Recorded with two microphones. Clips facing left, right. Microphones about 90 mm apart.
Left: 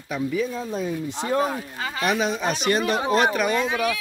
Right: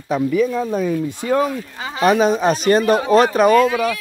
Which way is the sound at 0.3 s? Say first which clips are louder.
Right 8 dB; 60° right (ahead or behind).